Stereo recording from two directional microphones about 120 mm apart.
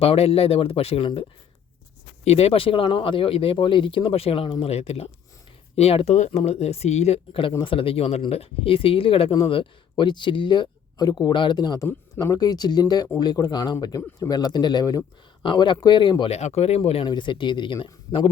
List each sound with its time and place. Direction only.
0.0 s speech: 55° left (ahead or behind)
2.2 s speech: 60° left (ahead or behind)
6.1 s speech: 75° left (ahead or behind)
7.6 s speech: 50° left (ahead or behind)
16.3 s speech: 60° left (ahead or behind)
17.1 s speech: 40° left (ahead or behind)